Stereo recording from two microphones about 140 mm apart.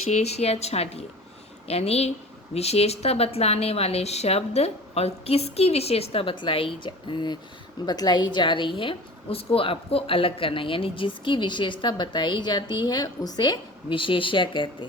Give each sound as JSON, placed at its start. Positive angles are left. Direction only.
{"t": 0.1, "sound": "a woman's voice", "side_deg": 50}